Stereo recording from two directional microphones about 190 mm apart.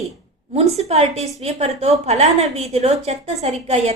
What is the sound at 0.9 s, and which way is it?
A woman's voice, 35° right (ahead or behind).